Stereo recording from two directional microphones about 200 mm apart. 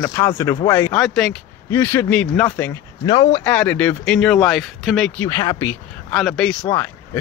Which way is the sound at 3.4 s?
5° left (ahead or behind).